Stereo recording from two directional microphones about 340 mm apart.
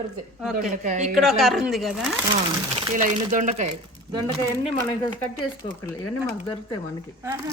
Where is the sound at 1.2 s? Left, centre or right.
Centre.